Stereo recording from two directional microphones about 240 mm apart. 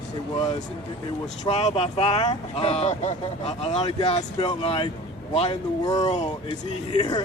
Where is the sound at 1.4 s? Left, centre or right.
Left.